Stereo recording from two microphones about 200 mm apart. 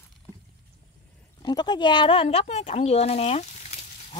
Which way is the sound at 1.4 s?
20° left (ahead or behind).